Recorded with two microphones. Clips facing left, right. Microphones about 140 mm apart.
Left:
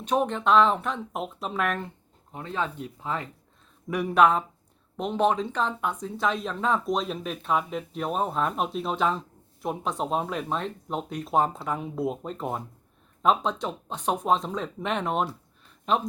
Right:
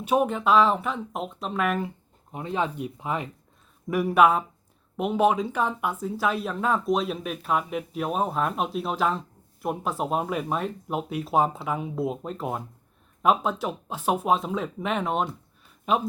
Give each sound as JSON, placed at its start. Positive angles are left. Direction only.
{"t": 0.0, "sound": "speech", "side_deg": -10}
{"t": 2.3, "sound": "speech", "side_deg": -15}
{"t": 3.8, "sound": "speech", "side_deg": -5}